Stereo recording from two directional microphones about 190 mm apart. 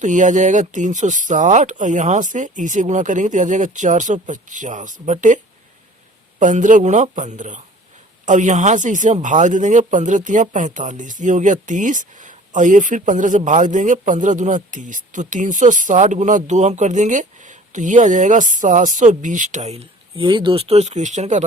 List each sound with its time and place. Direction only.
0.0 s speech: 40° right (ahead or behind)
6.4 s speech: 40° right (ahead or behind)